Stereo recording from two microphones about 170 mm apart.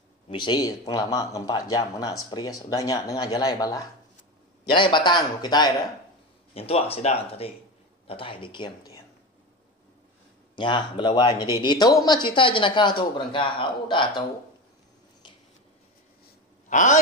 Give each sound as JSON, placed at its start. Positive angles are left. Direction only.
{"t": 0.3, "sound": "speech", "side_deg": 25}
{"t": 6.5, "sound": "speech", "side_deg": 35}
{"t": 10.5, "sound": "speech", "side_deg": 25}
{"t": 16.6, "sound": "a sound", "side_deg": 45}